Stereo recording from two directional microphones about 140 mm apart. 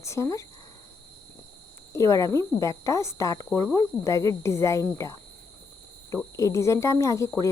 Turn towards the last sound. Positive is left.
turn(degrees=20)  # may be behind; listen again after turning